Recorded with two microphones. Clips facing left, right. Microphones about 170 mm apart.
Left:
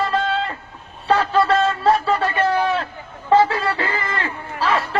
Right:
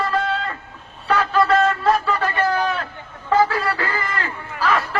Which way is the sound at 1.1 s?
30° left (ahead or behind).